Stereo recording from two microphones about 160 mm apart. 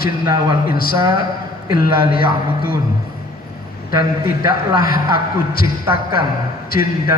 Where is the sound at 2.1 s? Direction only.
65° left (ahead or behind).